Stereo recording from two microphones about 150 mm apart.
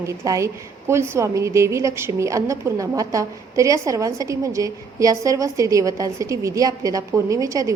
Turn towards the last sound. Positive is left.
turn(degrees=-20)  # may be behind; listen again after turning